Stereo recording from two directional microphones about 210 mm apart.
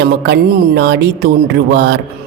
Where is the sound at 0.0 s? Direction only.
55° right (ahead or behind).